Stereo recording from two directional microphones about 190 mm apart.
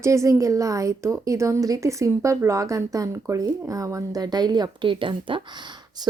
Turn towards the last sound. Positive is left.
turn(degrees=-25)  # may be behind; listen again after turning